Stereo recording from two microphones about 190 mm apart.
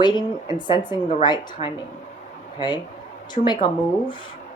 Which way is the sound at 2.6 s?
25° left (ahead or behind).